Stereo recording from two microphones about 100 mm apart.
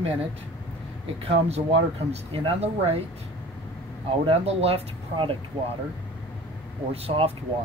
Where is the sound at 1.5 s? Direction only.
90° right.